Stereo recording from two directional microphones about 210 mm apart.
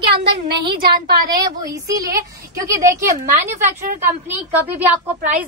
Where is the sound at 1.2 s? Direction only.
15° right (ahead or behind).